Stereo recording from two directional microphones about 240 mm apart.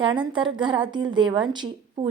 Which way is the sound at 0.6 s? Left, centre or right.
Centre.